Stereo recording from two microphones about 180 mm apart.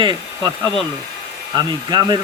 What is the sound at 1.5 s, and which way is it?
Speech, 25° right (ahead or behind).